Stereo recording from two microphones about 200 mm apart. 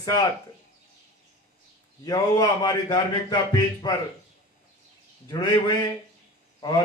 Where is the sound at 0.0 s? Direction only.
20° left (ahead or behind).